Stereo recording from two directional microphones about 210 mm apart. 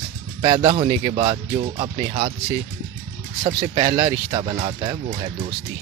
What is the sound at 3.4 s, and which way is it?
Speech, 25° right (ahead or behind).